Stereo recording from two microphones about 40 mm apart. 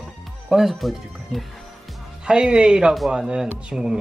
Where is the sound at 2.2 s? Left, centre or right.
Centre.